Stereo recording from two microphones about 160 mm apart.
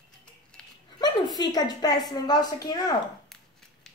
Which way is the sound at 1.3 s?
25° left (ahead or behind).